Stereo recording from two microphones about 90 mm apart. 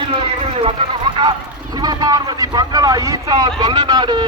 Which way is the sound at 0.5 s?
80° right.